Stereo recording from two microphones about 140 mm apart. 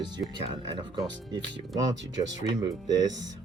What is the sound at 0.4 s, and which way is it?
Speech, 35° right (ahead or behind).